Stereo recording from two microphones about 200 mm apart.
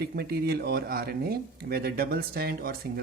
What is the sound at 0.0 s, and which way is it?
Speech, 50° right (ahead or behind).